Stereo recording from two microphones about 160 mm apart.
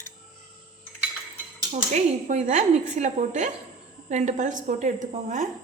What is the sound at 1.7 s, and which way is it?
Speech, 45° right (ahead or behind).